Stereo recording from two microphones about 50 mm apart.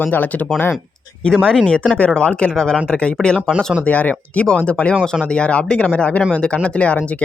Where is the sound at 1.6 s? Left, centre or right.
Left.